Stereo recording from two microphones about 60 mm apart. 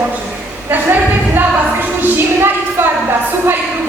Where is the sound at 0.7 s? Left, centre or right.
Right.